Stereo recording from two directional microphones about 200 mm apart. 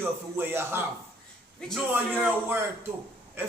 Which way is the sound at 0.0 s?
10° right (ahead or behind).